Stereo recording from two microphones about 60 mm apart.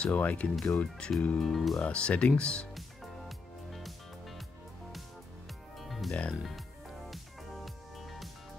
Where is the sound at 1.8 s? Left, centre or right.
Centre.